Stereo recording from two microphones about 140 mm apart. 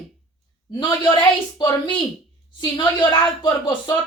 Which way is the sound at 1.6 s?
35° left (ahead or behind).